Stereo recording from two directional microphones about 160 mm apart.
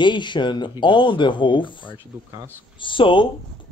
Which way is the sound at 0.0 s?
30° left (ahead or behind).